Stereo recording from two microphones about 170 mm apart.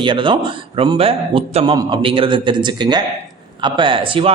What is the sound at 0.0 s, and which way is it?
A man's voice, 30° right (ahead or behind).